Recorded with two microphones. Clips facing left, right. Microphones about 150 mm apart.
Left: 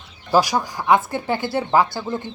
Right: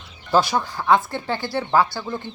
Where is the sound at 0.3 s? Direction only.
10° left (ahead or behind).